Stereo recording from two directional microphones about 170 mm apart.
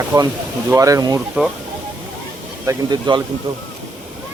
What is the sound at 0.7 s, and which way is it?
Speech, 20° right (ahead or behind).